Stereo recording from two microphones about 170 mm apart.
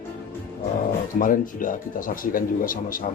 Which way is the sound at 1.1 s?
55° left (ahead or behind).